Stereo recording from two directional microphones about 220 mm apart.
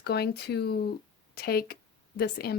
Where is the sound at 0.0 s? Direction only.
45° left (ahead or behind).